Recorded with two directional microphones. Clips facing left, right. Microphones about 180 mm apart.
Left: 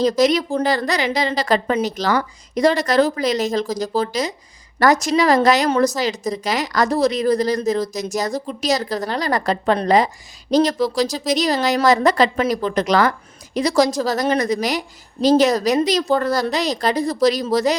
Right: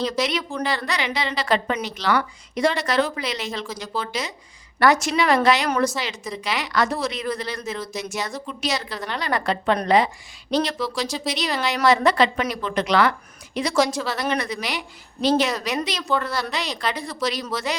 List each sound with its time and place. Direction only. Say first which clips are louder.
0.0 s speech: left 8 dB; 40° left (ahead or behind)